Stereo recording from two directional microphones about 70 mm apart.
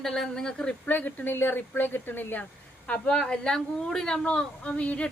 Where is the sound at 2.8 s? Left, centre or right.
Centre.